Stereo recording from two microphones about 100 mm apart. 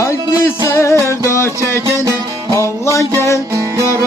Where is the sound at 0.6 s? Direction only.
30° left (ahead or behind).